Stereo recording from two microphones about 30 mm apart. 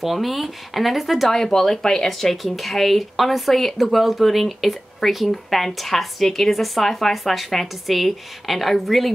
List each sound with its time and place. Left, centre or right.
0.0 s speech: centre
1.3 s speech: centre
2.4 s speech: centre